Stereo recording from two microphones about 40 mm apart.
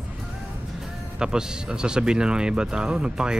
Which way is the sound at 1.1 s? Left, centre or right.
Centre.